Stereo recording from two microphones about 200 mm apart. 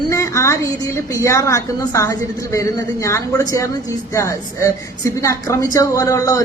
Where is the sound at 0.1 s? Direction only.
15° left (ahead or behind).